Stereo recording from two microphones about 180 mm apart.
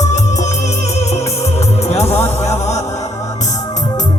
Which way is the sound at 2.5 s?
40° left (ahead or behind).